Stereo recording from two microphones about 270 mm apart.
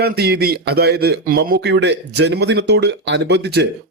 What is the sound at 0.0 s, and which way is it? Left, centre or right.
A man's voice, right.